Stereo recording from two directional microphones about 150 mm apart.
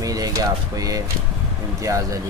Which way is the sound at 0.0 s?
25° right (ahead or behind).